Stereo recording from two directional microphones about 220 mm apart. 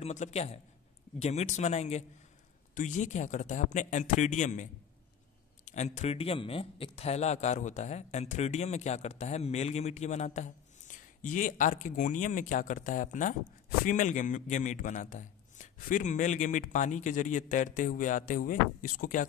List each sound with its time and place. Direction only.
0.0 s a man's voice: 30° left (ahead or behind)
5.7 s speech: 30° left (ahead or behind)